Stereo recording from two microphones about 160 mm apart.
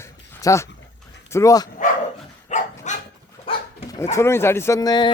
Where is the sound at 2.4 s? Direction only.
50° left (ahead or behind).